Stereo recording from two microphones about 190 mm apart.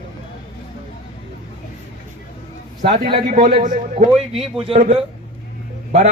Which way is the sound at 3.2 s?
45° right (ahead or behind).